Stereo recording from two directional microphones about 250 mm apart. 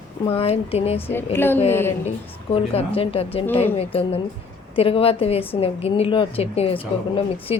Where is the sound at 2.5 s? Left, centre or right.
Left.